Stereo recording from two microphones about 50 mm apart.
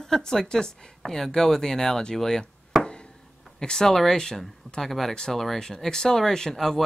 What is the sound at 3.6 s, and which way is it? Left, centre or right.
Speech, centre.